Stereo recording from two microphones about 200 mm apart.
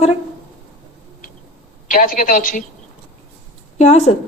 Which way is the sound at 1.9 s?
40° left (ahead or behind).